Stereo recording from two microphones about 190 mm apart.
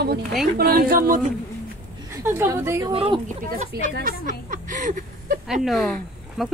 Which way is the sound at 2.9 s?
30° right (ahead or behind).